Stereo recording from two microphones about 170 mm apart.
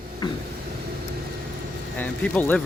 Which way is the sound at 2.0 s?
10° left (ahead or behind).